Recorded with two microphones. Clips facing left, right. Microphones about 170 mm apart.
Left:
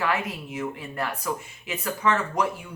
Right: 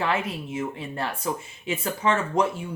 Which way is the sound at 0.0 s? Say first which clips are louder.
Right 1 dB; 25° right (ahead or behind).